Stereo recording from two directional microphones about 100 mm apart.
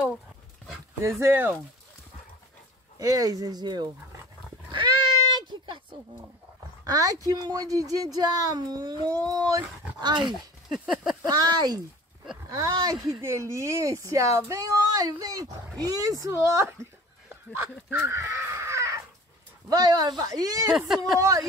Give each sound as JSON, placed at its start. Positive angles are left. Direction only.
{"t": 1.2, "sound": "speech", "side_deg": -20}
{"t": 3.0, "sound": "speech", "side_deg": -35}
{"t": 4.6, "sound": "a sound", "side_deg": -45}
{"t": 6.8, "sound": "speech", "side_deg": -35}
{"t": 10.7, "sound": "a sound", "side_deg": -5}
{"t": 11.2, "sound": "speech", "side_deg": -45}
{"t": 13.0, "sound": "speech", "side_deg": -25}
{"t": 16.3, "sound": "speech", "side_deg": -25}
{"t": 18.0, "sound": "a sound", "side_deg": -25}
{"t": 19.7, "sound": "speech", "side_deg": -40}